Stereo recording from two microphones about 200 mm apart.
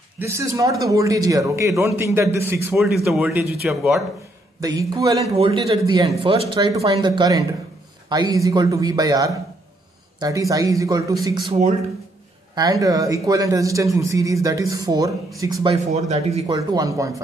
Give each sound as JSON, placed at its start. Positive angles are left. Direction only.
{"t": 0.2, "sound": "a man's voice", "side_deg": -15}
{"t": 3.1, "sound": "speech", "side_deg": 0}
{"t": 4.6, "sound": "a man's voice", "side_deg": -15}
{"t": 5.3, "sound": "a man's voice", "side_deg": -25}
{"t": 11.4, "sound": "speech", "side_deg": -35}
{"t": 12.5, "sound": "a man's voice", "side_deg": -20}
{"t": 15.7, "sound": "speech", "side_deg": -35}
{"t": 16.4, "sound": "a man's voice", "side_deg": -20}